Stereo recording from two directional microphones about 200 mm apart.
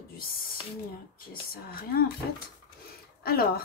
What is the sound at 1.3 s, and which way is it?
Speech, 50° left (ahead or behind).